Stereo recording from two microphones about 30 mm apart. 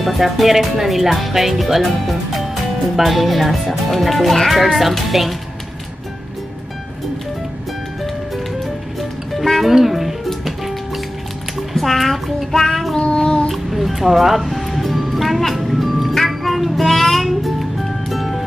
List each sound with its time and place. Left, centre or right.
0.2 s speech: centre
9.3 s music: centre
11.7 s music: centre
12.5 s child singing: centre
13.0 s child singing: left
13.5 s music: centre